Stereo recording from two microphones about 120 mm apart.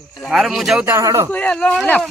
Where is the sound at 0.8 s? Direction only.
25° right (ahead or behind).